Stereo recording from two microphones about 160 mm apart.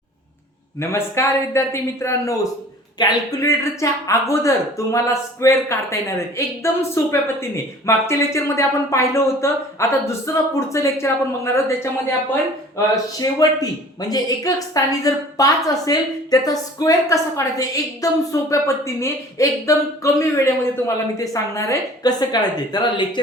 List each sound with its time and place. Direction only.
0.8 s a woman's voice: 15° left (ahead or behind)